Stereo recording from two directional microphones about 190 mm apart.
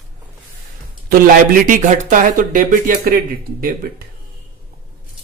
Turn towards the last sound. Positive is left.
turn(degrees=-50)  # may be behind; listen again after turning